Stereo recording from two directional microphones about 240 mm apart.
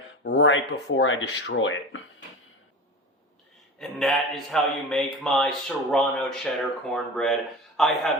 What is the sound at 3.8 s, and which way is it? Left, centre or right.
A man's voice, centre.